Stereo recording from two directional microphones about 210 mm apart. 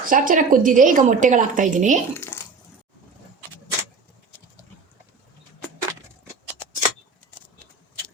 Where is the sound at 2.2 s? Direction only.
10° left (ahead or behind).